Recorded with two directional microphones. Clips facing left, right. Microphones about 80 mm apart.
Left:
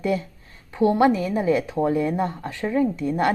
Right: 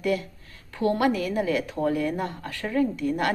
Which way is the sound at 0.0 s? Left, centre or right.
Left.